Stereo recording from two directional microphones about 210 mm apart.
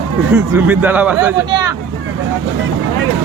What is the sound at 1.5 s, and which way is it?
Speech, 20° right (ahead or behind).